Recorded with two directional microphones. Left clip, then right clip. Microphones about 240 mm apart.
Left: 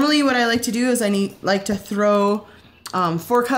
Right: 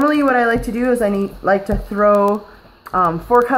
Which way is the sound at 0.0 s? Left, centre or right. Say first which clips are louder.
Right 3 dB; left.